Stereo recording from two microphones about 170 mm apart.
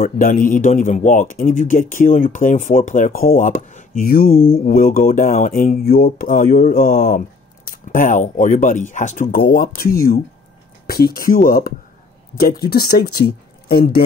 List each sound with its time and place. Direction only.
0.0 s a man's voice: 50° left (ahead or behind)